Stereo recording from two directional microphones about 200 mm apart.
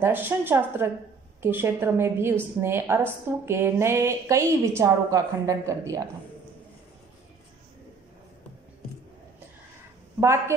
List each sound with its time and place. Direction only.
0.0 s a woman's voice: 10° right (ahead or behind)